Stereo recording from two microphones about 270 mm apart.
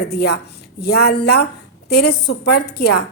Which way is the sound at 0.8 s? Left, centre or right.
Left.